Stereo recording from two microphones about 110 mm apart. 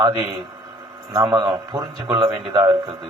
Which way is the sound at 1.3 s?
40° right (ahead or behind).